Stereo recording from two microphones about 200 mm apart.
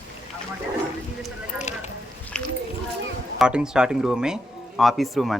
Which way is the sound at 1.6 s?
35° left (ahead or behind).